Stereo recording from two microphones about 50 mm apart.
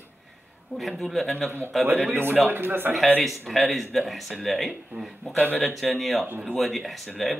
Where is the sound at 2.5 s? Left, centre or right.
Right.